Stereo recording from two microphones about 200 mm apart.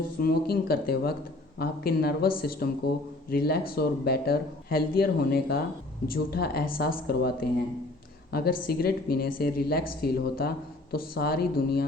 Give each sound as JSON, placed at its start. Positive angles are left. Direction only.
{"t": 0.2, "sound": "speech", "side_deg": 50}